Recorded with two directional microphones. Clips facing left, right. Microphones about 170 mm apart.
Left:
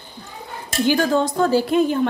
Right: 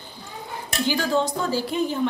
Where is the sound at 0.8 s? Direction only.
55° left (ahead or behind).